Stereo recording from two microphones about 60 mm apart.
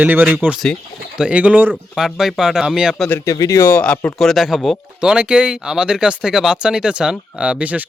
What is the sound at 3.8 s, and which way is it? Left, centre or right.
Speech, left.